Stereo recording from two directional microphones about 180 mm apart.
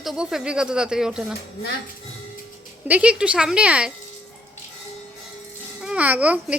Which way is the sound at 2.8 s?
10° right (ahead or behind).